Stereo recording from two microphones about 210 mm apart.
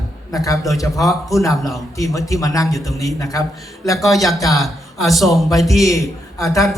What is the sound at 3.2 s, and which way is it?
Speech, 15° left (ahead or behind).